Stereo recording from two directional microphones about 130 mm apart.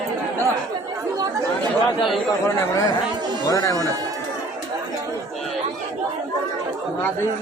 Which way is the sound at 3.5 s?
25° left (ahead or behind).